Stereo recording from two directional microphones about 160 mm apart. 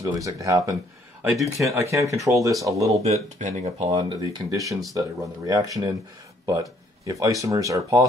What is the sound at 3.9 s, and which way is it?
Speech, 20° right (ahead or behind).